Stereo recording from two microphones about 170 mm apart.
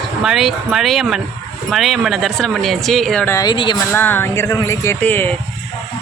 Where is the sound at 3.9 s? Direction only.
15° left (ahead or behind).